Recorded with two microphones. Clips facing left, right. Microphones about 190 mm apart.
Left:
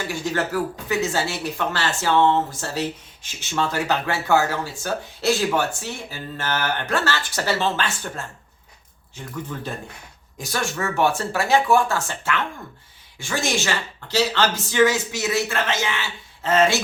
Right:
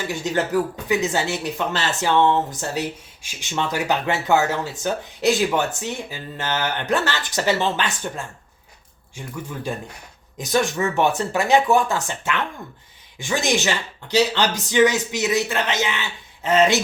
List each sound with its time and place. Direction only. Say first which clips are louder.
0.1 s speech: right 3 dB; 20° right (ahead or behind)